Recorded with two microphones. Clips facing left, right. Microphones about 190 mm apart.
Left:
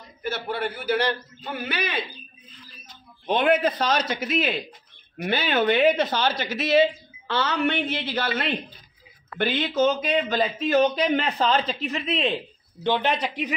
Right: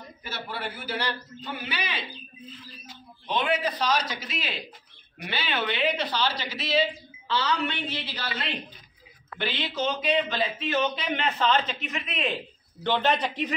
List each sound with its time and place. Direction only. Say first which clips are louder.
0.2 s a man's voice: left 8 dB; 55° left (ahead or behind)
3.3 s a woman's voice: left 6 dB; 55° left (ahead or behind); by 12.4 s 30° left (ahead or behind)
12.8 s speech: left 1 dB; 15° left (ahead or behind)